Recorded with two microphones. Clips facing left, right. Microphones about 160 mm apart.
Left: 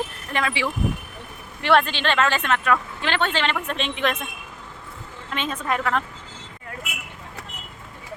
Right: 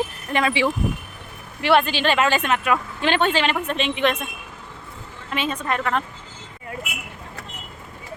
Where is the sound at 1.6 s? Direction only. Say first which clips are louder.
Right 1 dB; 5° right (ahead or behind).